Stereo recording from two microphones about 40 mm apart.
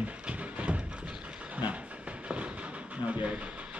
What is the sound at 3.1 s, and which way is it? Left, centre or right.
Vehicle, right.